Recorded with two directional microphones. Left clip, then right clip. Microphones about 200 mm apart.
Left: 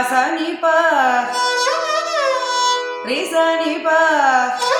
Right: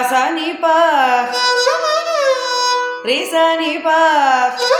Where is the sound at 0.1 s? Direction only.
35° right (ahead or behind).